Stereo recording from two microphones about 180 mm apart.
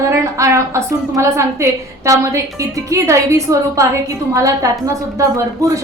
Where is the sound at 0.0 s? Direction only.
15° right (ahead or behind).